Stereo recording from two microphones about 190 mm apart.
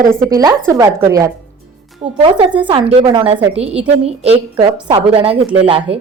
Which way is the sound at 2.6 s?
25° right (ahead or behind).